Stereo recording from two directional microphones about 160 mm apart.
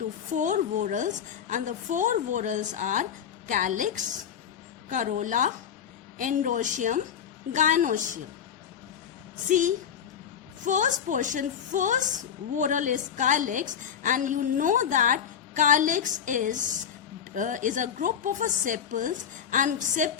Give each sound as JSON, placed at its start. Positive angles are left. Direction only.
{"t": 0.3, "sound": "a woman's voice", "side_deg": -50}
{"t": 9.5, "sound": "a woman's voice", "side_deg": -55}